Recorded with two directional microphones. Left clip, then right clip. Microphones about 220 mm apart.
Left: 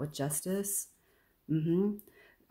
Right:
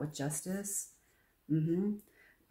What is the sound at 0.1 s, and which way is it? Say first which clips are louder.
Speech: left 4 dB; 45° left (ahead or behind).